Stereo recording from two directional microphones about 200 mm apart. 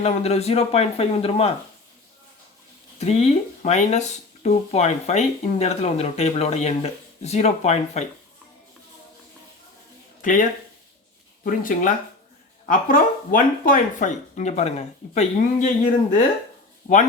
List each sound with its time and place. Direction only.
0.0 s speech: 30° left (ahead or behind)
3.0 s speech: 30° left (ahead or behind)
10.2 s speech: 40° left (ahead or behind)
11.4 s speech: 40° left (ahead or behind)